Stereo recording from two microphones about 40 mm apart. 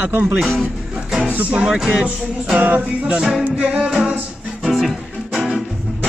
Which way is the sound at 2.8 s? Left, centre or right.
Right.